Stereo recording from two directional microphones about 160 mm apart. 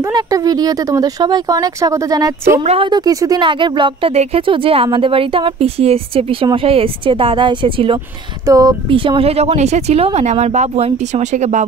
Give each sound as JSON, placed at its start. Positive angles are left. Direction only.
{"t": 0.0, "sound": "speech", "side_deg": -20}
{"t": 2.6, "sound": "a woman's voice", "side_deg": -40}
{"t": 2.9, "sound": "a woman's voice", "side_deg": -25}
{"t": 8.5, "sound": "a woman's voice", "side_deg": -20}